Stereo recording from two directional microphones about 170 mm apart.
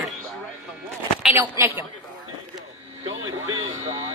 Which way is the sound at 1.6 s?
20° right (ahead or behind).